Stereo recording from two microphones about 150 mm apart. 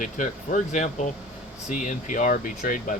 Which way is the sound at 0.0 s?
55° left (ahead or behind).